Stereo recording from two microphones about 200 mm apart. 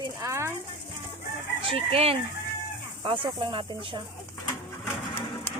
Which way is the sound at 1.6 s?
25° right (ahead or behind).